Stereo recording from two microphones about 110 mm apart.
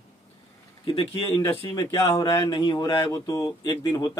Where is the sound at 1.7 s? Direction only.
35° left (ahead or behind).